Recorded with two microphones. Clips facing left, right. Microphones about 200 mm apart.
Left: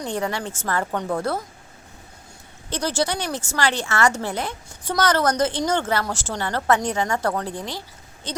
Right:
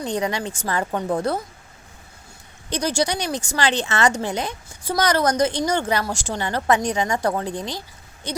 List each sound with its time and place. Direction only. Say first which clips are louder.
0.1 s speech: right 2 dB; 15° right (ahead or behind)
2.6 s speech: right 1 dB; 15° right (ahead or behind)